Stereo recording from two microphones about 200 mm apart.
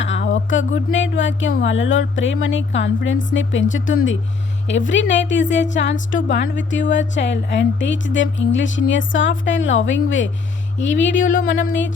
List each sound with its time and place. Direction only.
0.0 s a woman's voice: 65° left (ahead or behind)